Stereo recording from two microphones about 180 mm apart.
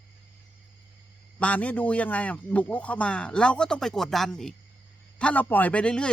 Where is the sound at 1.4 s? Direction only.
5° left (ahead or behind).